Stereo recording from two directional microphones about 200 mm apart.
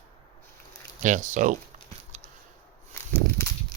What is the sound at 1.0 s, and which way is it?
Speech, 40° right (ahead or behind).